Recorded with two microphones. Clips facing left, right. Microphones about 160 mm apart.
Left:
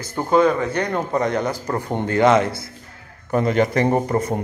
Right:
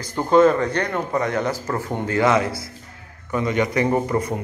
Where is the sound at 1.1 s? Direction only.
25° left (ahead or behind).